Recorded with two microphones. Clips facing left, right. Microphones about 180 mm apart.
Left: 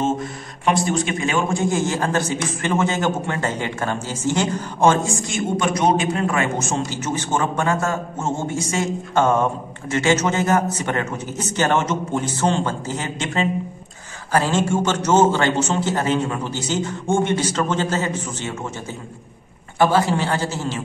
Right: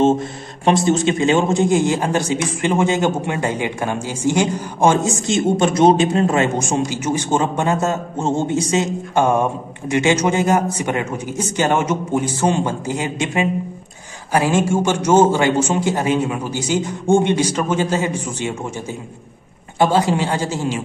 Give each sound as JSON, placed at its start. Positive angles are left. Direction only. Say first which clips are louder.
{"t": 0.0, "sound": "a man's voice", "louder": "right 7 dB", "side_deg": -30}
{"t": 6.6, "sound": "a man's voice", "louder": "right 4 dB", "side_deg": -15}
{"t": 19.8, "sound": "a man's voice", "louder": "right 1 dB", "side_deg": -20}